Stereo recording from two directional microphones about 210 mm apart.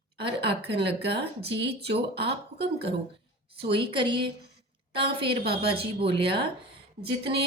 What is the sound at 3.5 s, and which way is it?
Speech, 25° right (ahead or behind).